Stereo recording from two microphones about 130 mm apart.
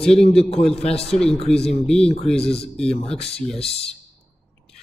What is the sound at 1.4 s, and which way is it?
Speech, 50° left (ahead or behind).